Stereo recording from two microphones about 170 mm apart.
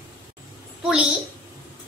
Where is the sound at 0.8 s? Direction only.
5° right (ahead or behind).